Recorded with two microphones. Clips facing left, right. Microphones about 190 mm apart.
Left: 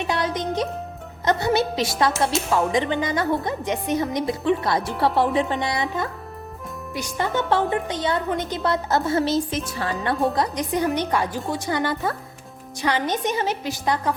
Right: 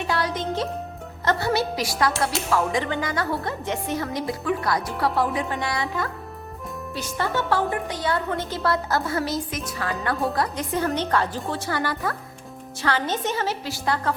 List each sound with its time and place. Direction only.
0.0 s music: 20° left (ahead or behind)
1.2 s a woman's voice: 20° left (ahead or behind)